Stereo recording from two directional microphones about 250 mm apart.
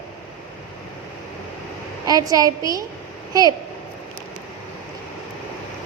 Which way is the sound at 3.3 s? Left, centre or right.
Centre.